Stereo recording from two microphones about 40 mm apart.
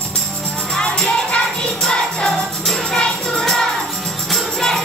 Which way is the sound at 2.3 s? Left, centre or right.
Centre.